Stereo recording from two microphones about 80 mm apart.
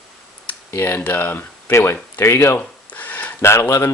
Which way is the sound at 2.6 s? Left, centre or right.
Left.